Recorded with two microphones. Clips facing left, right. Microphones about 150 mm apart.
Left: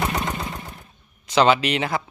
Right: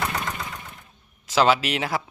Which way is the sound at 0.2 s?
25° left (ahead or behind).